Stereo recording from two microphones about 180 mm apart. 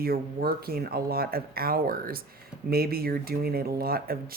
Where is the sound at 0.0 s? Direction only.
55° right (ahead or behind).